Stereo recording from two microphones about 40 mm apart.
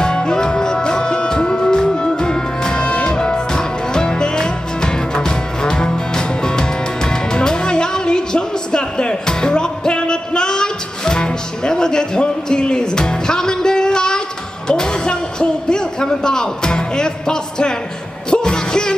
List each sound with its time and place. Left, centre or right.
0.0 s music: centre
14.7 s a sound: centre
18.3 s music: centre